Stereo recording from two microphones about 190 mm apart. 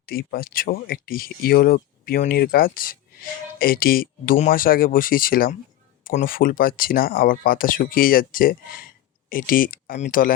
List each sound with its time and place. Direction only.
0.0 s speech: 50° left (ahead or behind)